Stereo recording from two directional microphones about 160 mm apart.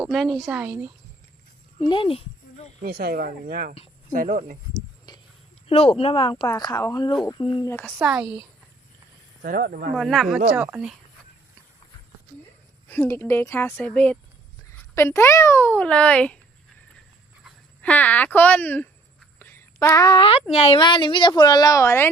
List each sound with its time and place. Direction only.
0.0 s speech: centre (ahead or behind)
1.8 s a child's voice: 30° left (ahead or behind)
2.8 s speech: 65° right (ahead or behind)
5.6 s speech: 40° left (ahead or behind)
6.3 s a child's voice: 25° left (ahead or behind)
8.0 s speech: 5° right (ahead or behind)
9.4 s speech: 60° right (ahead or behind)
9.9 s speech: centre (ahead or behind)
12.9 s a child's voice: 15° left (ahead or behind)
17.4 s speech: 10° left (ahead or behind); by 20.8 s 40° left (ahead or behind)
20.8 s speech: 30° left (ahead or behind); by 22.1 s 15° left (ahead or behind)